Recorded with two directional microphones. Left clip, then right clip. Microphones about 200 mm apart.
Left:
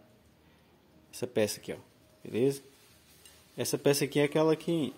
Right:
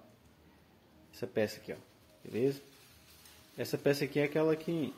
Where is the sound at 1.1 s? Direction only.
40° left (ahead or behind).